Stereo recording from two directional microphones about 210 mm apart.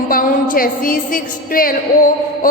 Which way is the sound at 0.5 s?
40° left (ahead or behind).